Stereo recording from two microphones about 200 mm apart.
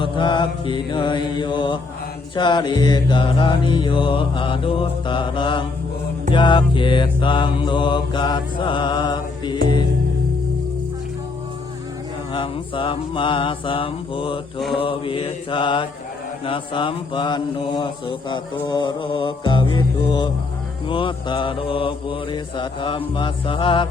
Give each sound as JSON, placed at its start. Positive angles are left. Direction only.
{"t": 0.0, "sound": "mantra", "side_deg": 25}
{"t": 12.3, "sound": "mantra", "side_deg": 25}